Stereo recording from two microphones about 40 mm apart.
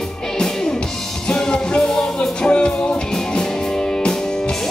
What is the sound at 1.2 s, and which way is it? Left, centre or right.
Music, centre.